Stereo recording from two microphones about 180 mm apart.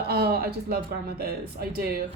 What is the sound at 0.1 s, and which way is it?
Speech, 60° right (ahead or behind).